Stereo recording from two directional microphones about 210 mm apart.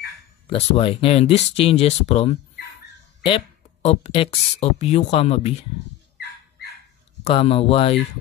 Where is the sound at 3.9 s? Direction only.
30° left (ahead or behind).